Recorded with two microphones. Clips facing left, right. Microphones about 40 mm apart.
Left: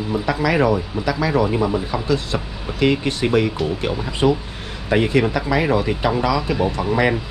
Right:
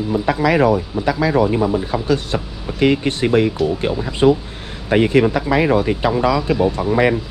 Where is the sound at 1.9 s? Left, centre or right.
Right.